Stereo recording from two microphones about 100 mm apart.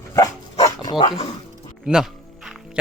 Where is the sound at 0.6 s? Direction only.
45° left (ahead or behind).